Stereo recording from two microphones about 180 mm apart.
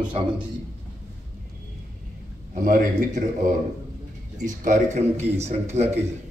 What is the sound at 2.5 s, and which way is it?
A man's voice, 45° right (ahead or behind).